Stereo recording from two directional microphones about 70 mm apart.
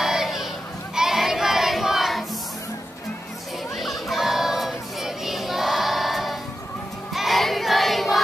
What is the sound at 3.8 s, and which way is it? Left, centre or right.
Music, centre.